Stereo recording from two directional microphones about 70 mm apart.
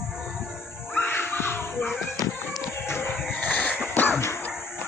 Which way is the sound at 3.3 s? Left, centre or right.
Left.